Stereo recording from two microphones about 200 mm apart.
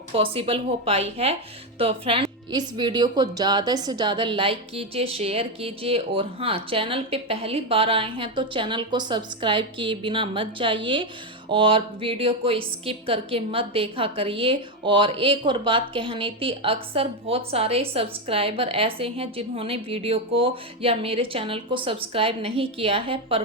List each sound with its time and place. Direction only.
0.1 s speech: 30° right (ahead or behind)